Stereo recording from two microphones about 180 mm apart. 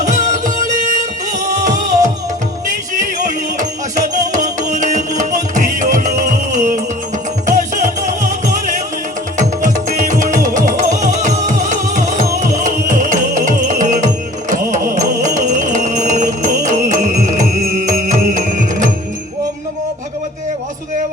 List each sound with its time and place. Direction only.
0.0 s music: 45° right (ahead or behind)
9.4 s music: 45° right (ahead or behind)